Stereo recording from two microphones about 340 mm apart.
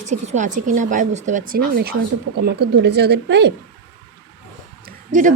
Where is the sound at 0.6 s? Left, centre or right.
Right.